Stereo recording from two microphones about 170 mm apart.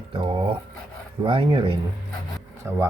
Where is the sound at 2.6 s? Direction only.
15° right (ahead or behind).